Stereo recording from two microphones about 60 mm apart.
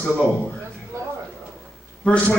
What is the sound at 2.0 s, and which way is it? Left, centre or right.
Speech, left.